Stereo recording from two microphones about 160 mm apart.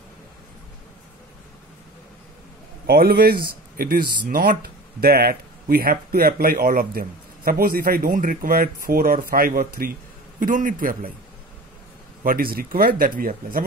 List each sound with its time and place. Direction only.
2.9 s speech: 75° right (ahead or behind)
12.2 s speech: 65° right (ahead or behind)